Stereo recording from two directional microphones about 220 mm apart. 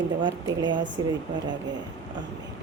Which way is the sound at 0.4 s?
20° right (ahead or behind).